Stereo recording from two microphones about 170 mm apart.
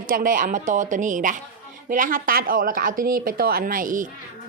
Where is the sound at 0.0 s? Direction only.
55° right (ahead or behind).